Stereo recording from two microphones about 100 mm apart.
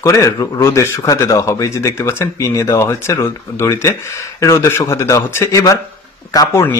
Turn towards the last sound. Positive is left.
turn(degrees=40)  # may be behind; listen again after turning